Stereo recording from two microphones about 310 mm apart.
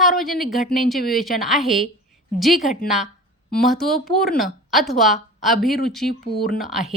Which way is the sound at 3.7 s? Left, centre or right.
Centre.